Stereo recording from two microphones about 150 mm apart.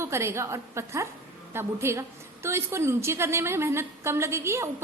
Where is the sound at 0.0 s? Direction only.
15° right (ahead or behind).